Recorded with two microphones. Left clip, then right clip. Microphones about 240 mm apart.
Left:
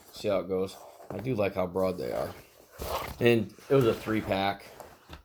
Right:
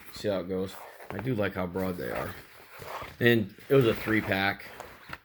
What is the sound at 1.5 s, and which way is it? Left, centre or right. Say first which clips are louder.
Speech: left 4 dB; right.